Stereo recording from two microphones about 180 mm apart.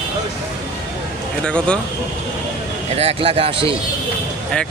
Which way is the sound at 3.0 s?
35° right (ahead or behind).